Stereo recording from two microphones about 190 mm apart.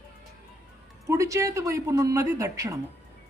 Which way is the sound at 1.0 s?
15° right (ahead or behind).